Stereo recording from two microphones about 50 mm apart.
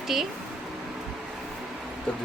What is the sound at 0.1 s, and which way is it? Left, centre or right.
Speech, centre.